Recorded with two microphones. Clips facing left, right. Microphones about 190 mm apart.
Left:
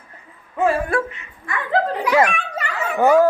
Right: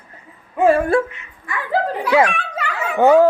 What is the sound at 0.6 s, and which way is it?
Speech, 25° right (ahead or behind).